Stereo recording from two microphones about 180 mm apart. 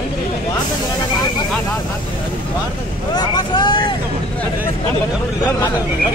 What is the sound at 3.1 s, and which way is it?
Vehicle, 25° left (ahead or behind).